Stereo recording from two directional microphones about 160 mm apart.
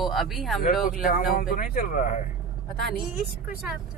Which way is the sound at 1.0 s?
60° left (ahead or behind).